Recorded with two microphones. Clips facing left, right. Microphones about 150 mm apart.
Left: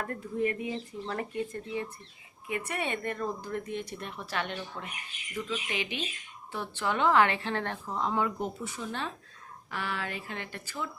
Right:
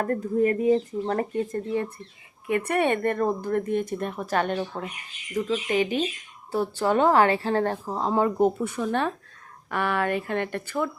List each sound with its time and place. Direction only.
0.0 s a woman's voice: 45° right (ahead or behind)